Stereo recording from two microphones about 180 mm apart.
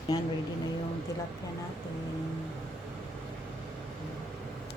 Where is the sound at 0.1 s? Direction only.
20° left (ahead or behind).